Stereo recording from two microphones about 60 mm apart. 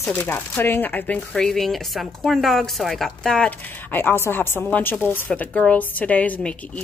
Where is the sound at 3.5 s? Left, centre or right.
Left.